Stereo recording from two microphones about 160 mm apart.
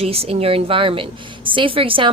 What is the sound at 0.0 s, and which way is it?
A woman's voice, 35° right (ahead or behind).